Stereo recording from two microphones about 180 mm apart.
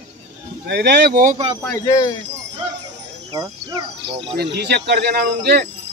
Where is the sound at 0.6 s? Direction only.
65° right (ahead or behind); by 1.4 s 50° right (ahead or behind).